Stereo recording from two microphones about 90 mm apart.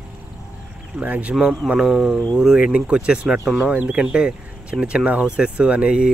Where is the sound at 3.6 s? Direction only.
15° right (ahead or behind).